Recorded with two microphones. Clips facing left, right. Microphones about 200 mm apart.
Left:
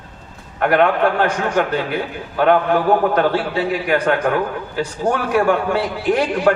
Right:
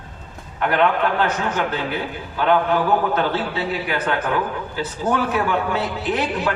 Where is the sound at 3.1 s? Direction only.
10° left (ahead or behind).